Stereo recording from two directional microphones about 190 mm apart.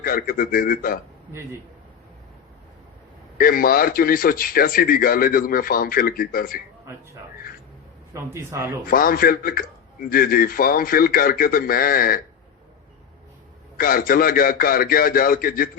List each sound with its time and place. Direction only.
0.0 s a man's voice: 50° left (ahead or behind)
3.3 s a man's voice: 50° left (ahead or behind)
8.1 s a man's voice: 15° right (ahead or behind)
8.9 s a man's voice: 50° left (ahead or behind)
13.7 s a man's voice: 50° left (ahead or behind)